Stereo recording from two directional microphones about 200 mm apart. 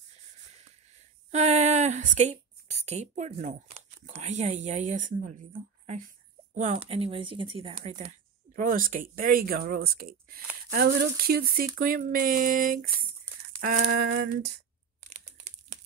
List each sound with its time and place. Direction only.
1.3 s speech: 35° right (ahead or behind)
8.5 s speech: 45° right (ahead or behind)
13.6 s a sound: 55° right (ahead or behind)
15.0 s crumpling: 35° right (ahead or behind)